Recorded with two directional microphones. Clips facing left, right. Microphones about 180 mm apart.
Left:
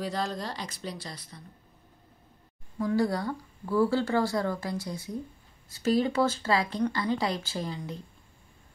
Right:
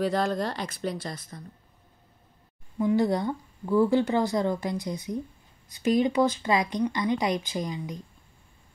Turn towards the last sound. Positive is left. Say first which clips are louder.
# right 3 dB
turn(degrees=-10)  # may be behind; listen again after turning